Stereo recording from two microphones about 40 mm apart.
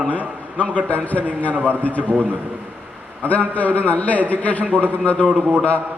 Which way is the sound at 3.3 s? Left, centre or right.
Left.